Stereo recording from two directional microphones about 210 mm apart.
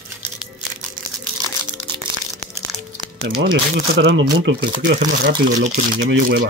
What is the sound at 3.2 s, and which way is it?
Speech, 55° right (ahead or behind).